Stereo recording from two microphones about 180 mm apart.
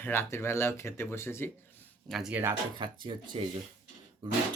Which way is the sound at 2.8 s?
25° right (ahead or behind).